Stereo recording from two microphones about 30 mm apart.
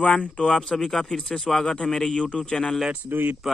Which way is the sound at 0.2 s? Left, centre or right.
Left.